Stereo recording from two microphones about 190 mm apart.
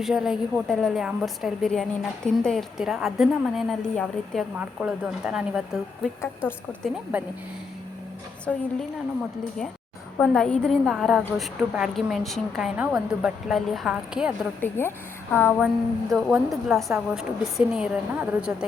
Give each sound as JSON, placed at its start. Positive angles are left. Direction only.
{"t": 0.0, "sound": "a woman's voice", "side_deg": 0}
{"t": 8.5, "sound": "a woman's voice", "side_deg": 5}
{"t": 10.2, "sound": "a woman's voice", "side_deg": 5}
{"t": 14.6, "sound": "a woman's voice", "side_deg": 10}